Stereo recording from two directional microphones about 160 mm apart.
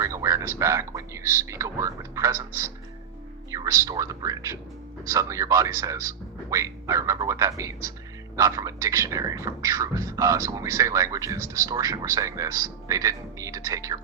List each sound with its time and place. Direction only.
0.0 s a sound: 20° right (ahead or behind)
0.6 s speech: 20° right (ahead or behind)
3.5 s speech: 20° right (ahead or behind)